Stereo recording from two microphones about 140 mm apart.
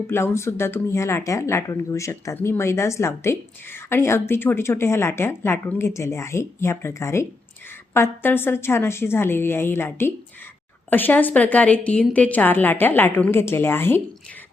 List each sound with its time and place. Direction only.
0.1 s a woman's voice: 20° left (ahead or behind)